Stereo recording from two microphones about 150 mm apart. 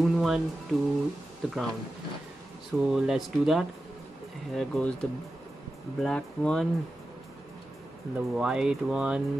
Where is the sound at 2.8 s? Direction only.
5° right (ahead or behind).